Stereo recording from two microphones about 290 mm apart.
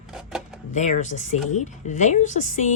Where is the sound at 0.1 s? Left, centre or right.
Centre.